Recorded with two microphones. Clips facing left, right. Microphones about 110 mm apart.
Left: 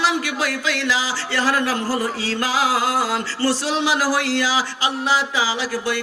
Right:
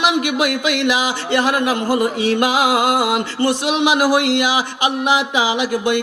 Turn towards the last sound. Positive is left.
turn(degrees=-20)  # may be behind; listen again after turning